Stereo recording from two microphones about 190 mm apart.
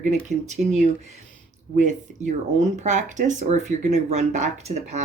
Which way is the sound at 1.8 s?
40° right (ahead or behind).